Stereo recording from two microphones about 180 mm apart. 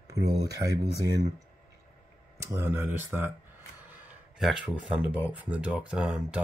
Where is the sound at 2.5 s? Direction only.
15° right (ahead or behind).